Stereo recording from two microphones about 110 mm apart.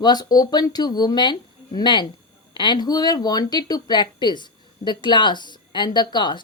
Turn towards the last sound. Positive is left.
turn(degrees=45)  # may be behind; listen again after turning